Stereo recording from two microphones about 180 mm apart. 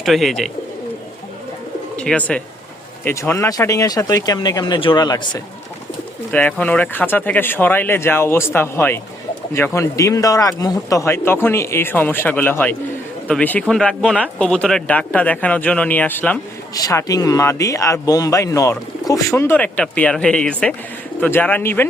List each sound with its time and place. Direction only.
0.0 s speech: centre (ahead or behind)
2.0 s speech: 5° left (ahead or behind); by 5.4 s 25° left (ahead or behind)
6.3 s speech: 10° left (ahead or behind)